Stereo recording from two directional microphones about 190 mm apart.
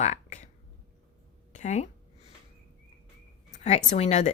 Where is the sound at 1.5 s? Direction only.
40° left (ahead or behind).